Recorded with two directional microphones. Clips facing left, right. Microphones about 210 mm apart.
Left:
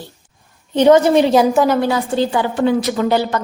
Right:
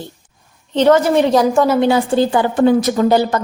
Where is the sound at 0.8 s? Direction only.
15° left (ahead or behind).